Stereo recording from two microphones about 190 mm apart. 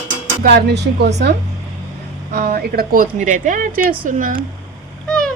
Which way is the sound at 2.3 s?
55° right (ahead or behind).